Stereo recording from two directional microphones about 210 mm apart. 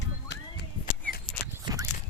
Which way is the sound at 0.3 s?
55° left (ahead or behind).